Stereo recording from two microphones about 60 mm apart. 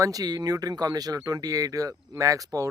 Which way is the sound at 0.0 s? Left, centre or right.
Right.